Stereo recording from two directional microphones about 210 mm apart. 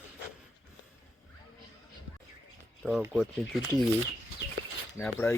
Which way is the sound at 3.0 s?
5° right (ahead or behind).